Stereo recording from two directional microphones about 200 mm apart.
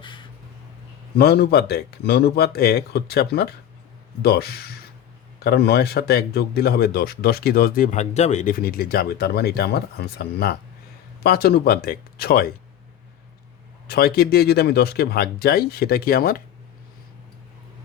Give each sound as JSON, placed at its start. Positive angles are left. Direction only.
{"t": 0.0, "sound": "a sound", "side_deg": 25}
{"t": 1.1, "sound": "speech", "side_deg": 55}
{"t": 13.8, "sound": "speech", "side_deg": 50}